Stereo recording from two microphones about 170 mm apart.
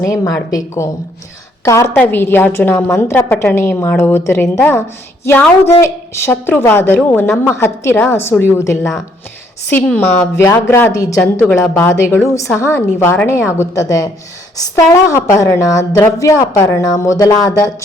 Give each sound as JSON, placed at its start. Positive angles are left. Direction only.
{"t": 0.0, "sound": "a woman's voice", "side_deg": 20}
{"t": 4.4, "sound": "a woman's voice", "side_deg": 5}
{"t": 4.7, "sound": "a woman's voice", "side_deg": 15}